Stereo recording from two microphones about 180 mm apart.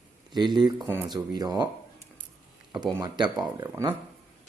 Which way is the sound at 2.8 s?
20° right (ahead or behind).